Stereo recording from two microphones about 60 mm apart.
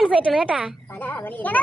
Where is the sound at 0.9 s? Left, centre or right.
Left.